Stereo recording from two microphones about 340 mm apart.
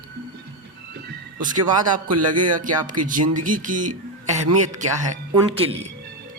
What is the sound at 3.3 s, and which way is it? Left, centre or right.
Speech, right.